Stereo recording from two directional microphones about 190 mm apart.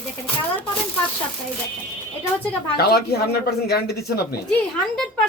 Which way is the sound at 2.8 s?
55° left (ahead or behind).